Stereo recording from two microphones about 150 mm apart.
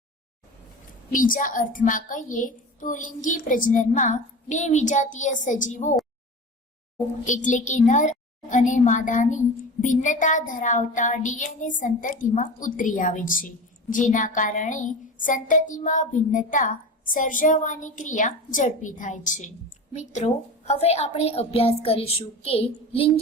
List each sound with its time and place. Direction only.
1.1 s a woman's voice: 65° left (ahead or behind)
7.3 s a woman's voice: 55° left (ahead or behind)
21.2 s child singing: 45° left (ahead or behind)